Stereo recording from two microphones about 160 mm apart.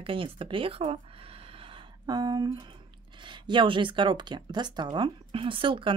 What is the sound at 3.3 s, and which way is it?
Speech, 30° right (ahead or behind).